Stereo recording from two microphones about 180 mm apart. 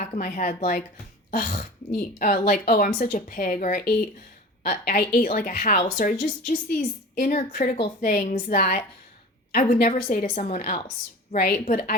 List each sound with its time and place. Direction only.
0.0 s a woman's voice: 40° left (ahead or behind)
9.8 s a woman's voice: 45° left (ahead or behind)
10.8 s a woman's voice: 30° left (ahead or behind)
11.4 s a woman's voice: 45° left (ahead or behind)